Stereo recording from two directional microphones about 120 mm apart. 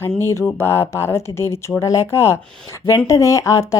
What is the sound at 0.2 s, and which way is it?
A woman's voice, 20° left (ahead or behind).